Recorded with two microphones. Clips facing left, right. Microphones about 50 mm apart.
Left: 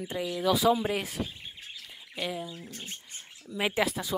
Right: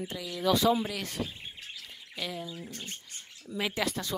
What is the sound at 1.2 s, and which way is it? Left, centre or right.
Speech, left.